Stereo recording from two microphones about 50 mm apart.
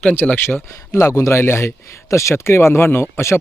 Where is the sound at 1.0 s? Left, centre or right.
Left.